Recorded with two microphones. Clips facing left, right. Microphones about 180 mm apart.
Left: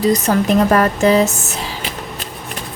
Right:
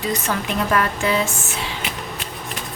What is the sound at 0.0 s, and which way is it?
Speech, 40° left (ahead or behind).